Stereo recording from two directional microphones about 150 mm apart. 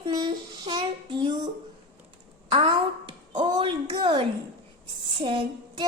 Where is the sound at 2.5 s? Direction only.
35° right (ahead or behind).